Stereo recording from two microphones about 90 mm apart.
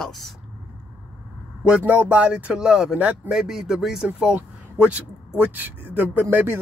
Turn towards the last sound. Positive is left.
turn(degrees=-25)  # may be behind; listen again after turning